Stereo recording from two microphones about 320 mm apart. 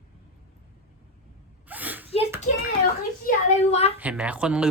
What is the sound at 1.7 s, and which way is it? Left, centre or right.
Gasp, centre.